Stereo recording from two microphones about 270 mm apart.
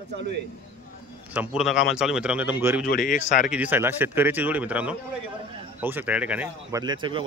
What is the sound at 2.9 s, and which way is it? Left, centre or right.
Speech, left.